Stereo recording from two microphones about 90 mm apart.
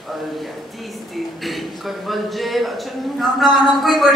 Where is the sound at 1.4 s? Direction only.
Centre (ahead or behind).